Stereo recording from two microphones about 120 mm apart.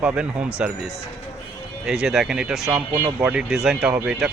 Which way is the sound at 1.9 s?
5° right (ahead or behind).